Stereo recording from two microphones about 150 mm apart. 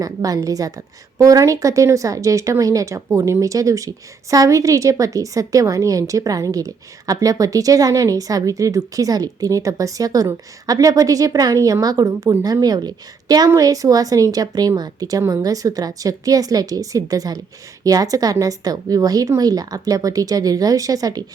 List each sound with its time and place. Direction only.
0.0 s a woman's voice: 25° right (ahead or behind)